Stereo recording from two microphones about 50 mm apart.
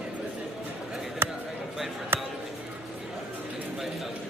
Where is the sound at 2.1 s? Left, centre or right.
Right.